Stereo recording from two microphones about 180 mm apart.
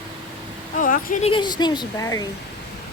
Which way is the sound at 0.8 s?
45° left (ahead or behind).